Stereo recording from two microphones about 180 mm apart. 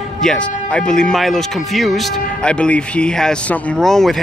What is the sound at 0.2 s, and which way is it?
Speech, 5° left (ahead or behind).